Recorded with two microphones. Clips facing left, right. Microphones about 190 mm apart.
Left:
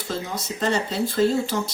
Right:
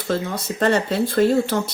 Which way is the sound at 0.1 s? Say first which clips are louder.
Right 6 dB; 60° right (ahead or behind).